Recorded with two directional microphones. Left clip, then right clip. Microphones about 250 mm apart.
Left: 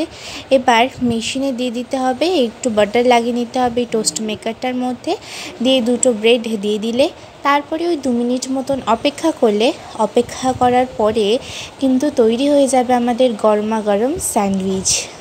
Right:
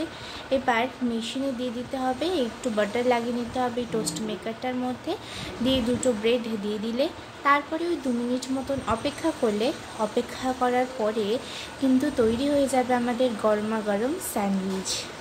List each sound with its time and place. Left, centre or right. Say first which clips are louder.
0.5 s a woman's voice: left 12 dB; left